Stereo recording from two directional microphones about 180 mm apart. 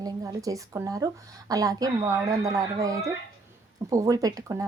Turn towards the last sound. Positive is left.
turn(degrees=-20)  # may be behind; listen again after turning